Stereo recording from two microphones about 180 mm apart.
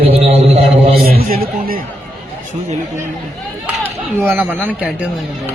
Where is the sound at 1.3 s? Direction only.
55° right (ahead or behind).